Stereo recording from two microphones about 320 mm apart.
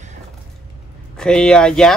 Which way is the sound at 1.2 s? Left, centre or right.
Centre.